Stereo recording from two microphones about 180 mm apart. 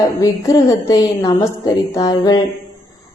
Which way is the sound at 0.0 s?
20° left (ahead or behind).